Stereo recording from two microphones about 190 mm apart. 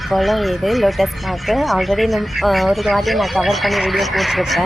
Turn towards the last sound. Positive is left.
turn(degrees=0)  # may be behind; listen again after turning